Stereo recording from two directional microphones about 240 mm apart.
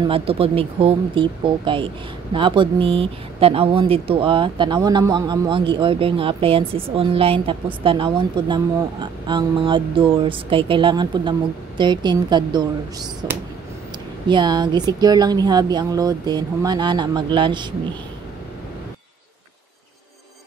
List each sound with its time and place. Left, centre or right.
0.0 s speech: right